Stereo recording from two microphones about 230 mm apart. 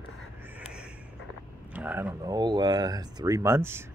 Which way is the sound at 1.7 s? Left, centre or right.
Centre.